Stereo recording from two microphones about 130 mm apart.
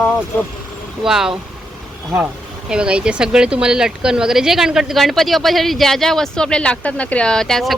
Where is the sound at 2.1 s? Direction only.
20° right (ahead or behind).